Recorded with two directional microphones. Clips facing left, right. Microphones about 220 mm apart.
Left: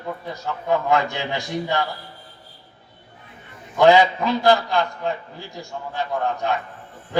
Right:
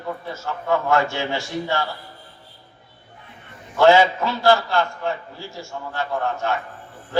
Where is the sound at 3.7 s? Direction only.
15° left (ahead or behind).